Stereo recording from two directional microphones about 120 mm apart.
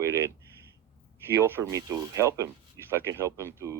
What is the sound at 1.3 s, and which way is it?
Speech, 20° right (ahead or behind).